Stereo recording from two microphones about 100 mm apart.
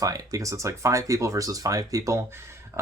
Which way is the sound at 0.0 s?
35° right (ahead or behind).